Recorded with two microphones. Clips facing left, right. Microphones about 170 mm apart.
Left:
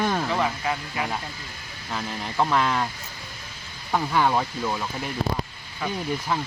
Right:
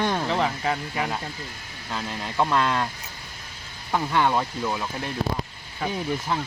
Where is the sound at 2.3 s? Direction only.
10° left (ahead or behind).